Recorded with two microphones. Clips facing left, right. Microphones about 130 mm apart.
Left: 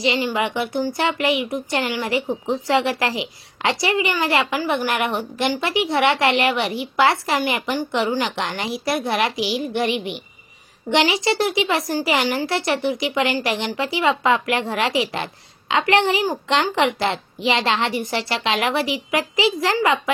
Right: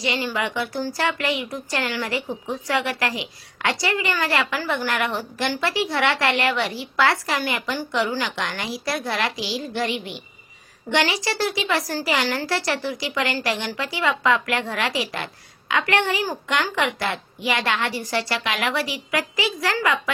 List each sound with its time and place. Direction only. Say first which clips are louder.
0.0 s speech: left 4 dB; 20° left (ahead or behind)